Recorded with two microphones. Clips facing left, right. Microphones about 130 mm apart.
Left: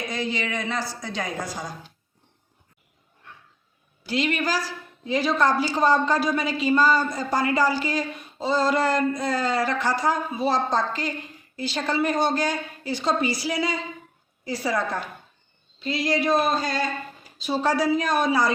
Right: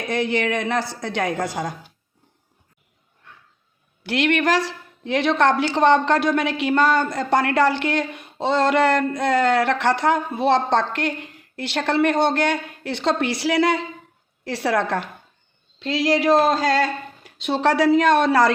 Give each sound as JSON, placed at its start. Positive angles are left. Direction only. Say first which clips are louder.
{"t": 0.1, "sound": "a woman's voice", "louder": "right 10 dB", "side_deg": -65}
{"t": 4.0, "sound": "a woman's voice", "louder": "right 5 dB", "side_deg": -70}
{"t": 15.8, "sound": "speech", "louder": "right 4 dB", "side_deg": -90}